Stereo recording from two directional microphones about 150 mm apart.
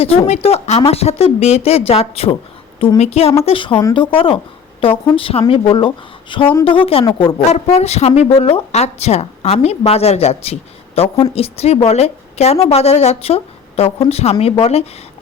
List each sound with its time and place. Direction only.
0.0 s a woman's voice: 40° left (ahead or behind)